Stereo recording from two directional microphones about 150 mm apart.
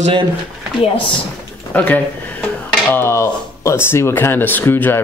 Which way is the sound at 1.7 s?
10° left (ahead or behind).